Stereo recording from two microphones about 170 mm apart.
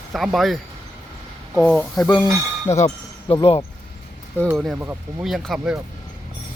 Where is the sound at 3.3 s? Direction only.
35° left (ahead or behind).